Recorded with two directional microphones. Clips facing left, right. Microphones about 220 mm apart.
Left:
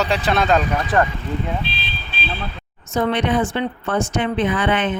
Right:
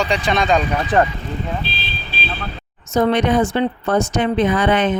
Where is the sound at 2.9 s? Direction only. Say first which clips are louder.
Right 3 dB; 40° right (ahead or behind).